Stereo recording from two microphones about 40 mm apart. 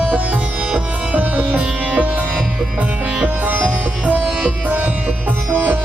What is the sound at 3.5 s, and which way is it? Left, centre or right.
Sitar, right.